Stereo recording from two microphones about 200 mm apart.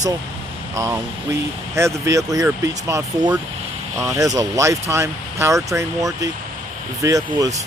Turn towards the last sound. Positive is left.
turn(degrees=-15)  # may be behind; listen again after turning